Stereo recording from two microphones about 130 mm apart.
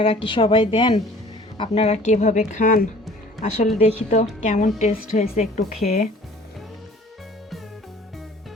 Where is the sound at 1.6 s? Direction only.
50° left (ahead or behind); by 2.9 s 85° left.